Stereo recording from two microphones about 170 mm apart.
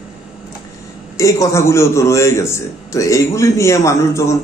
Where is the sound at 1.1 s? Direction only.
20° left (ahead or behind).